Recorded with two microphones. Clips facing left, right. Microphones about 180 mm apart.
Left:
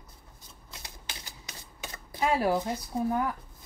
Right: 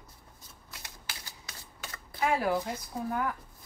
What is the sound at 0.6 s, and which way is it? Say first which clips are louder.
Typewriter: left 2 dB; 20° left (ahead or behind).